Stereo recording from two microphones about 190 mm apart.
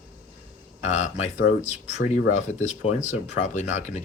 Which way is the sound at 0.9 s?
35° left (ahead or behind).